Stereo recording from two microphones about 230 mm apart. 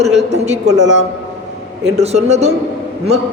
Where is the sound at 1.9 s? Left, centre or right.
Right.